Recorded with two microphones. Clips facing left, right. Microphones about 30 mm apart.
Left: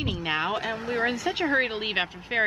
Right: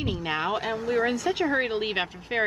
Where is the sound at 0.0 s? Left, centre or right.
Centre.